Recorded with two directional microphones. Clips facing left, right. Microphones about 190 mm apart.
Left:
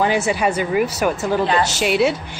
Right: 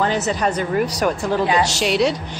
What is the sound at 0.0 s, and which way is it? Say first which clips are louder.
A woman's voice: left 2 dB; 10° left (ahead or behind).